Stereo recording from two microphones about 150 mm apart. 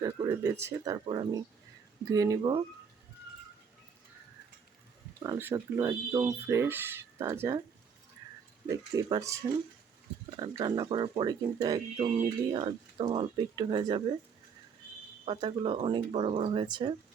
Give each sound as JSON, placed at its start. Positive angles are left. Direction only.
{"t": 0.3, "sound": "speech", "side_deg": -15}
{"t": 0.9, "sound": "speech", "side_deg": -30}
{"t": 5.4, "sound": "speech", "side_deg": -15}
{"t": 8.6, "sound": "speech", "side_deg": -20}
{"t": 10.4, "sound": "speech", "side_deg": -30}
{"t": 15.2, "sound": "speech", "side_deg": -35}